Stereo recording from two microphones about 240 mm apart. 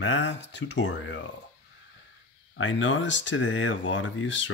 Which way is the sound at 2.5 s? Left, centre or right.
Left.